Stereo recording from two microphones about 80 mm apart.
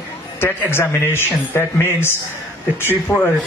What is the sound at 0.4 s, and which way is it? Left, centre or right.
A man's voice, left.